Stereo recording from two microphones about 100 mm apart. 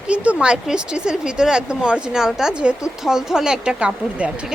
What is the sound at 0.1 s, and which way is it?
Speech, 10° right (ahead or behind).